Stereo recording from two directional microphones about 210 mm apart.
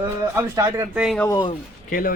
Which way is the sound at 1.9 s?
40° left (ahead or behind).